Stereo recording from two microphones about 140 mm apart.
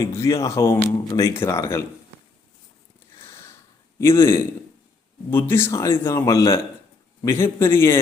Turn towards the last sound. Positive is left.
turn(degrees=15)  # may be behind; listen again after turning